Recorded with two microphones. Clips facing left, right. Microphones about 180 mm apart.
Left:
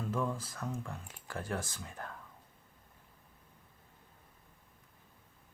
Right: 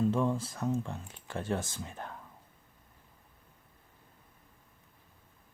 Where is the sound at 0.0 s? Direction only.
25° right (ahead or behind).